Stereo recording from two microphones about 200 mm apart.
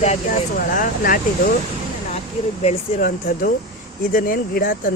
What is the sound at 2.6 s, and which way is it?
Speech, 45° left (ahead or behind).